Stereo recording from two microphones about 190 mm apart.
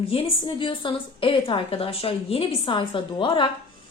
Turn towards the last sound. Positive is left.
turn(degrees=25)  # may be behind; listen again after turning